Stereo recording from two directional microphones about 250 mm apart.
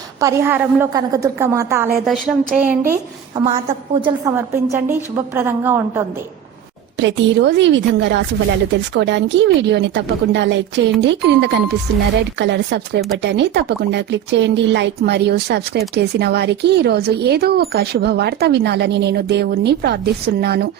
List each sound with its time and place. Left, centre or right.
0.2 s a woman's voice: centre
7.0 s speech: right